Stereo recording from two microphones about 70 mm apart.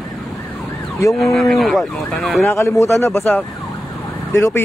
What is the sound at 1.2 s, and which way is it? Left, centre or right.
Speech, centre.